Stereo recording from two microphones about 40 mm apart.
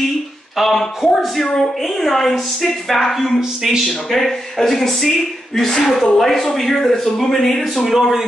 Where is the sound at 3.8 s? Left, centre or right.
Centre.